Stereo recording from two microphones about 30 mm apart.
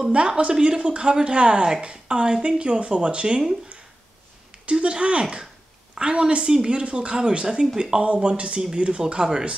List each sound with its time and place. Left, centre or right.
0.0 s speech: right
4.6 s speech: right
5.2 s speech: right